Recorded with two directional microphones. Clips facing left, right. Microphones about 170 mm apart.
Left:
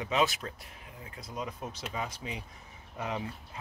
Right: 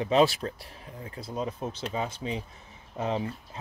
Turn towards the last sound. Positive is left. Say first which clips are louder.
# right 6 dB
turn(degrees=-25)  # may be behind; listen again after turning